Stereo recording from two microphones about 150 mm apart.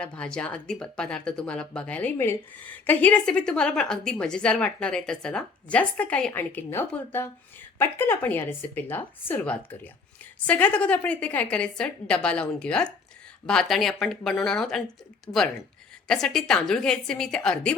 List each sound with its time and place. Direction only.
0.0 s a woman's voice: 5° left (ahead or behind)
15.3 s speech: 25° left (ahead or behind)
16.0 s a woman's voice: 5° left (ahead or behind)